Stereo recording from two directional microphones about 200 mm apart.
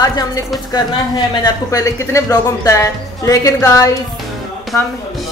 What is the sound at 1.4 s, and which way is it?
Speech, 15° left (ahead or behind).